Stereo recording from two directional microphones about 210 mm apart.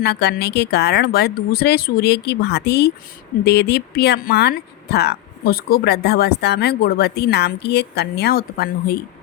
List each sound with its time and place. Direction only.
0.0 s speech: 50° left (ahead or behind)